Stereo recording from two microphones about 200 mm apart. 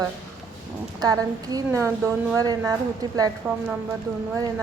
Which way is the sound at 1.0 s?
20° right (ahead or behind).